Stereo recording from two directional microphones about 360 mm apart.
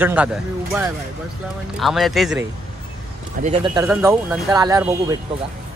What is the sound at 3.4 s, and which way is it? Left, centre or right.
Speech, centre.